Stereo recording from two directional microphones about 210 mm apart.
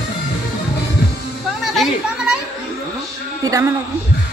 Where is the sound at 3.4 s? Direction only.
15° right (ahead or behind).